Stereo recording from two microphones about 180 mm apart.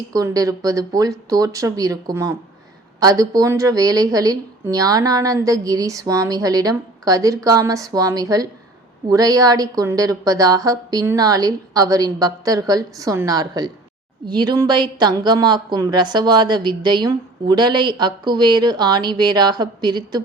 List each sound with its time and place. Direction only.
0.1 s a woman's voice: 20° right (ahead or behind)